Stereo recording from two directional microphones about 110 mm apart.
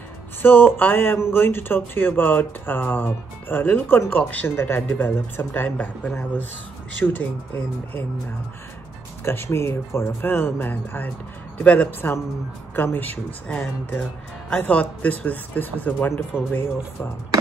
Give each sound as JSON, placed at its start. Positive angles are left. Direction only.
{"t": 0.4, "sound": "speech", "side_deg": 20}
{"t": 9.2, "sound": "speech", "side_deg": 20}